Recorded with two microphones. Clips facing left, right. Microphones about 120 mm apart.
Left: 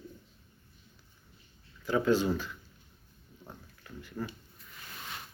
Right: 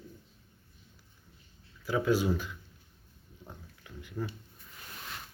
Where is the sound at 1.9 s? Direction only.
5° right (ahead or behind).